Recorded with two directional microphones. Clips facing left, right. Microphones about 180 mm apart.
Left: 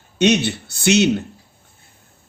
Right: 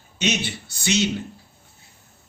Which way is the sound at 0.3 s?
65° left (ahead or behind).